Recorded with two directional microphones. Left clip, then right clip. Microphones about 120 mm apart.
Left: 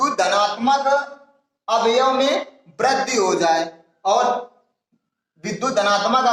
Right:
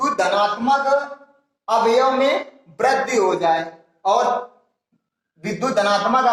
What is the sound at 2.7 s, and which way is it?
Speech, 55° left (ahead or behind).